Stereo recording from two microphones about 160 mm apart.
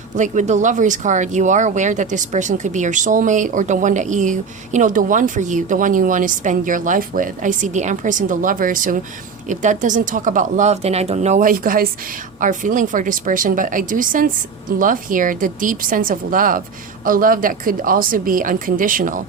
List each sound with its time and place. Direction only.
0.2 s a woman's voice: 50° right (ahead or behind)